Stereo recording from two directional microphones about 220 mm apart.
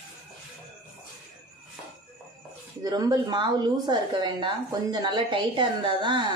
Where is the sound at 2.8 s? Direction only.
15° right (ahead or behind).